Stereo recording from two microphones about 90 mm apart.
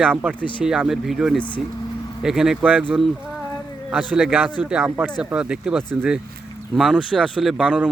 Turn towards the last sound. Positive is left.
turn(degrees=-10)  # may be behind; listen again after turning